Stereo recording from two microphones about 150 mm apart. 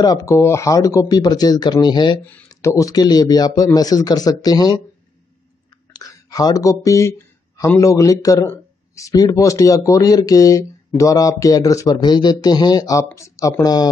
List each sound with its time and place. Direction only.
0.0 s a man's voice: 25° left (ahead or behind)
2.2 s a man's voice: 15° left (ahead or behind)
5.9 s a man's voice: 25° left (ahead or behind)